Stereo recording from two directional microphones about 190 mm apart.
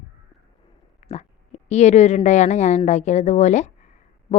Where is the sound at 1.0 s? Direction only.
35° left (ahead or behind).